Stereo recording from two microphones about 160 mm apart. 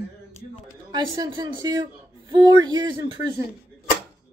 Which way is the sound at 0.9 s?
25° right (ahead or behind).